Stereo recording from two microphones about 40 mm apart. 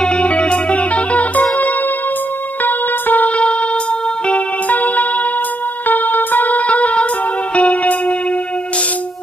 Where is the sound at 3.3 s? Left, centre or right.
Left.